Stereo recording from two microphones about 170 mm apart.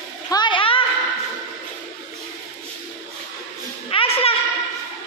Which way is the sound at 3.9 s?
35° left (ahead or behind).